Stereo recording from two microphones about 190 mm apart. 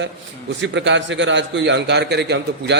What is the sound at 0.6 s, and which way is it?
A man's voice, 70° right (ahead or behind).